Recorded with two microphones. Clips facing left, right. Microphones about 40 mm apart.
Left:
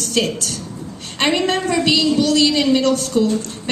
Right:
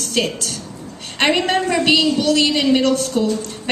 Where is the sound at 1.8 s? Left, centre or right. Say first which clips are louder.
Left 1 dB; right.